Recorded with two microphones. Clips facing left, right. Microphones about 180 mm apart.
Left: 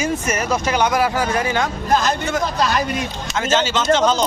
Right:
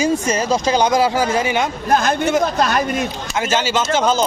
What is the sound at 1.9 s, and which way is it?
Speech, 55° right (ahead or behind).